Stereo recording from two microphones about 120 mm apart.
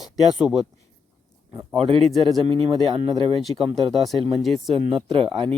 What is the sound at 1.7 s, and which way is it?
Speech, 45° right (ahead or behind).